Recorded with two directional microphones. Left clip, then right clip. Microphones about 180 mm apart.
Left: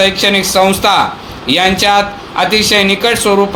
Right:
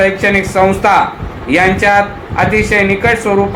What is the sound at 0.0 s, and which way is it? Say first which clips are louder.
Speech: left 1 dB; 50° left (ahead or behind).